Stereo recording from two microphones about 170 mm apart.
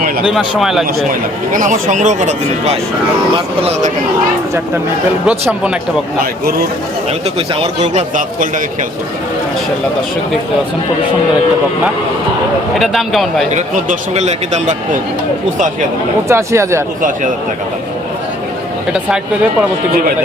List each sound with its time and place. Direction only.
0.3 s speech: centre (ahead or behind)
1.5 s speech: 50° right (ahead or behind)
5.2 s speech: 5° right (ahead or behind)
7.1 s speech: 35° right (ahead or behind)
8.1 s speech: 50° right (ahead or behind)
12.7 s speech: centre (ahead or behind)
13.5 s speech: 45° right (ahead or behind)
16.3 s speech: 15° right (ahead or behind)